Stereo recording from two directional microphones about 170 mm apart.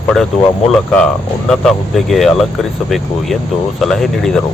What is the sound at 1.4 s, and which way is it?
Speech, centre (ahead or behind).